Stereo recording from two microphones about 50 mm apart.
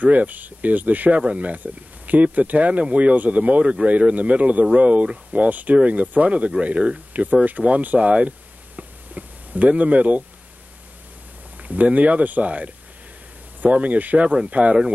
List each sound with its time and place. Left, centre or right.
0.0 s speech: right
11.5 s speech: right